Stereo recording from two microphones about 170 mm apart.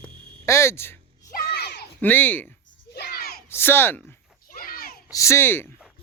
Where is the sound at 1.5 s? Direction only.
75° left (ahead or behind).